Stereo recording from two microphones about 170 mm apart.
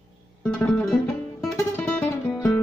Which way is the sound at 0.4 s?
5° left (ahead or behind).